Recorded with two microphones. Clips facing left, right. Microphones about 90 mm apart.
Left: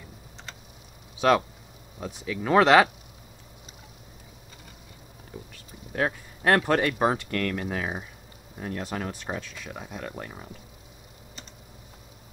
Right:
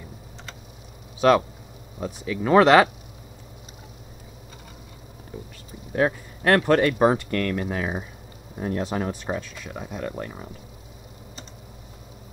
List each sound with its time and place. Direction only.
1.2 s speech: centre (ahead or behind)
5.3 s a sound: 5° left (ahead or behind)
6.0 s speech: centre (ahead or behind)
8.5 s speech: 25° right (ahead or behind)
9.2 s speech: 5° right (ahead or behind)